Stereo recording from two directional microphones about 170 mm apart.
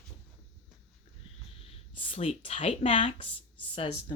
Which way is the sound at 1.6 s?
35° left (ahead or behind).